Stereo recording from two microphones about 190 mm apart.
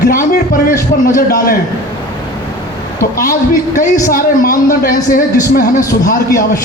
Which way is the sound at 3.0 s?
45° left (ahead or behind).